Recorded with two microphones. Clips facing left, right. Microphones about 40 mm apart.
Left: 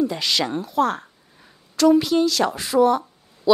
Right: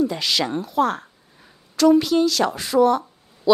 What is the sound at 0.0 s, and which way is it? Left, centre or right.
A woman's voice, centre.